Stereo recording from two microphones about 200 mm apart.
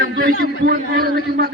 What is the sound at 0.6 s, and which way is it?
Speech, 50° right (ahead or behind).